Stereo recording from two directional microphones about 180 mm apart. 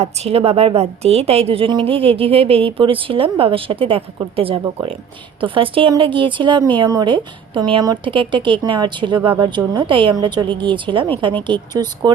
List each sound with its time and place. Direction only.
0.0 s a woman's voice: 35° right (ahead or behind)